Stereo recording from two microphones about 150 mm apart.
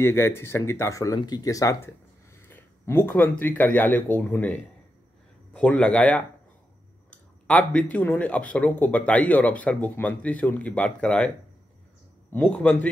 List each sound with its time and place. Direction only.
0.0 s speech: 15° left (ahead or behind)
7.4 s speech: 10° left (ahead or behind)